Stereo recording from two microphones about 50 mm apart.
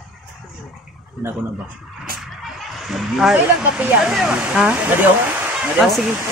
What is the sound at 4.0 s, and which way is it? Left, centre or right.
Speech, centre.